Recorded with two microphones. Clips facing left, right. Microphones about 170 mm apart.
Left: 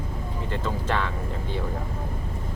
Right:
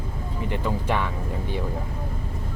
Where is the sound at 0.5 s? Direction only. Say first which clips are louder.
Right 2 dB; 15° right (ahead or behind).